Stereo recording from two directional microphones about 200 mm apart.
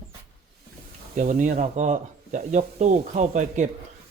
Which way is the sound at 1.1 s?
40° right (ahead or behind).